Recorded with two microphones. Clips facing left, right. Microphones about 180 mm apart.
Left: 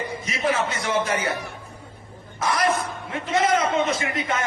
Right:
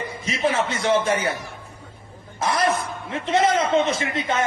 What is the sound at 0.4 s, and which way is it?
Speech, 30° right (ahead or behind).